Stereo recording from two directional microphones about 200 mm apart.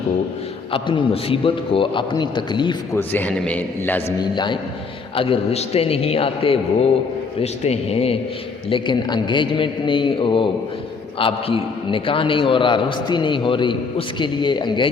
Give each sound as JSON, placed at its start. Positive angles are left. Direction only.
{"t": 0.7, "sound": "a man's voice", "side_deg": 25}
{"t": 3.0, "sound": "a man's voice", "side_deg": 10}
{"t": 4.2, "sound": "a man's voice", "side_deg": 20}